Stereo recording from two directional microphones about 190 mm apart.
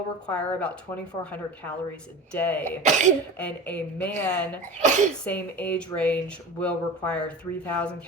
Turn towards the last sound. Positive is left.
turn(degrees=5)  # may be behind; listen again after turning